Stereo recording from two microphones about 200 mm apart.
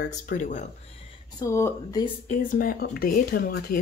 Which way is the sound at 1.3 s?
15° left (ahead or behind).